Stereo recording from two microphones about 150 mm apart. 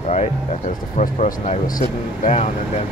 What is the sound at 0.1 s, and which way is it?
Speech, 50° left (ahead or behind).